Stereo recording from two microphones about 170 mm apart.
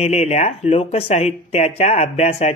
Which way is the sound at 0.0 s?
40° left (ahead or behind).